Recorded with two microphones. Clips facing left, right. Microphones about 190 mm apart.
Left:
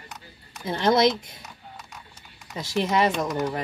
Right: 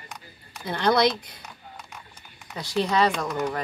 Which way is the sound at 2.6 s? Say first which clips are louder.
Even; 20° left (ahead or behind).